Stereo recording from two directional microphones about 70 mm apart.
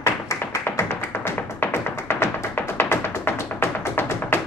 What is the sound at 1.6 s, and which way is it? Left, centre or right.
Tap, left.